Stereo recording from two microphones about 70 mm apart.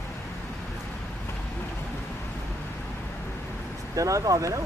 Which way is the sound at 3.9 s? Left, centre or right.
Right.